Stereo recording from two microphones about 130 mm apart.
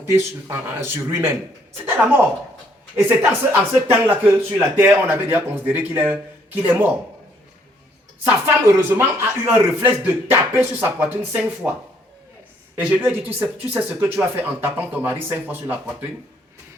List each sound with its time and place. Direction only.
0.1 s speech: 20° right (ahead or behind)
8.2 s speech: 20° right (ahead or behind)